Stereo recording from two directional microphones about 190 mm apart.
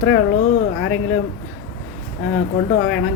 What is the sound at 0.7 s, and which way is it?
Speech, 70° left (ahead or behind).